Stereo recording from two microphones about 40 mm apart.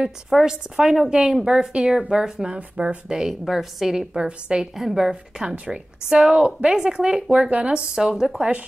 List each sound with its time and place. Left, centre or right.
0.5 s a woman's voice: centre
2.5 s speech: right
3.2 s a woman's voice: centre
4.1 s speech: right
4.7 s a woman's voice: centre
5.7 s speech: centre
7.9 s a woman's voice: centre